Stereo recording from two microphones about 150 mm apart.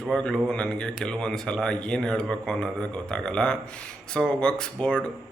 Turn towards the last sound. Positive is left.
turn(degrees=5)  # may be behind; listen again after turning